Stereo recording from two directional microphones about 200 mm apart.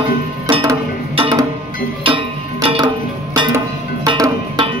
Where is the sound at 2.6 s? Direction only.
25° right (ahead or behind).